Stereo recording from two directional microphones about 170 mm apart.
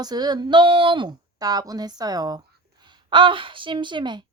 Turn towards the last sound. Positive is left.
turn(degrees=-25)  # may be behind; listen again after turning